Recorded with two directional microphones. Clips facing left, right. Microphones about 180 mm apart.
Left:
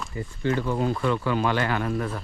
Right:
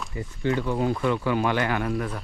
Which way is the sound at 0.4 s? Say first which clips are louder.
Even; 20° right (ahead or behind).